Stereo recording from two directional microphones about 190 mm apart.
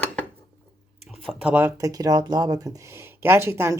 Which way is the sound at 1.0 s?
Centre (ahead or behind).